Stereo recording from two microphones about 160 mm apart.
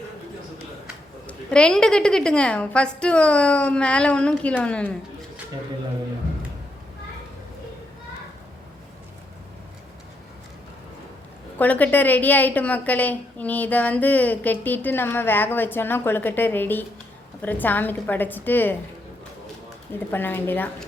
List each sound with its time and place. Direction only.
1.3 s a woman's voice: 5° left (ahead or behind)
11.5 s a woman's voice: 10° left (ahead or behind)
20.1 s a woman's voice: 15° left (ahead or behind)